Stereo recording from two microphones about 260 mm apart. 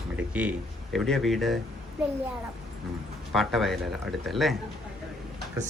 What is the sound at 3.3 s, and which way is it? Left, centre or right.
Speech, centre.